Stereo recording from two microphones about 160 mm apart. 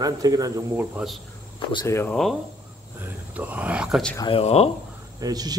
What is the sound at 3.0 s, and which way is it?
A man's voice, 10° right (ahead or behind).